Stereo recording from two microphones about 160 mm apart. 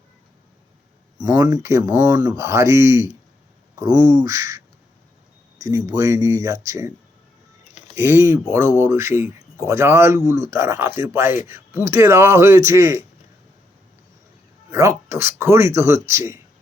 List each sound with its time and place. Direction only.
1.2 s speech: 20° right (ahead or behind)
7.9 s speech: 15° right (ahead or behind)
14.7 s speech: 20° right (ahead or behind)